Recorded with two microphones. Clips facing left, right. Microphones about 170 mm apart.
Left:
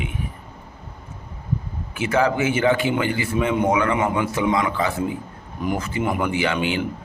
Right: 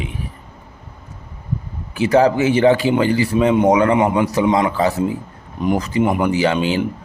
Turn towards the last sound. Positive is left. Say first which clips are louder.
# right 5 dB
turn(degrees=-35)  # may be behind; listen again after turning